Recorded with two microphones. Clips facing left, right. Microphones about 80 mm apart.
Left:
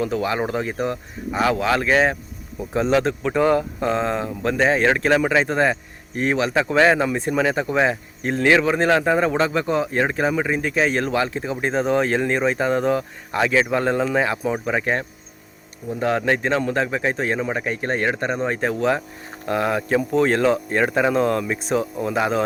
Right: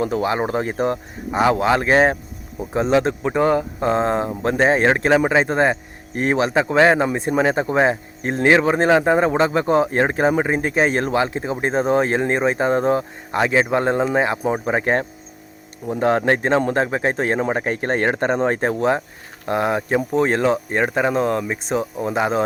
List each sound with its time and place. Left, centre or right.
0.0 s a man's voice: right
1.3 s a man's voice: right
2.6 s a man's voice: right
19.5 s speech: right